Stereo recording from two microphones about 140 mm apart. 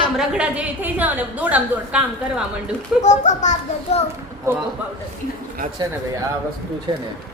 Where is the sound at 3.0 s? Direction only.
60° left (ahead or behind).